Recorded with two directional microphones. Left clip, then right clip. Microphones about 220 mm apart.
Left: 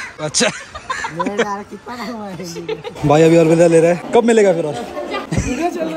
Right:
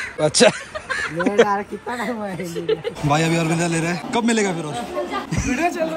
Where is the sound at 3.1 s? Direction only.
5° right (ahead or behind).